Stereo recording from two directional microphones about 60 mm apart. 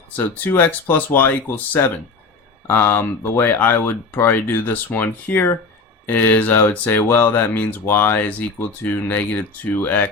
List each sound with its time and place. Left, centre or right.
0.2 s speech: left